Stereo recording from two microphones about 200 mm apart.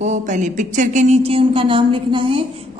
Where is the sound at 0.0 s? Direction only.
35° right (ahead or behind).